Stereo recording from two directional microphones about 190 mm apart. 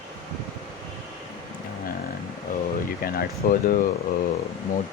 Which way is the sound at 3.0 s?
50° left (ahead or behind).